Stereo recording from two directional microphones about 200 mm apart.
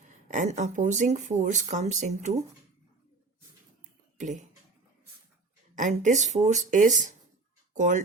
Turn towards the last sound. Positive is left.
turn(degrees=-35)  # may be behind; listen again after turning